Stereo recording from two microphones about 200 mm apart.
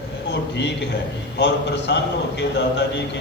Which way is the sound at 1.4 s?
60° left (ahead or behind).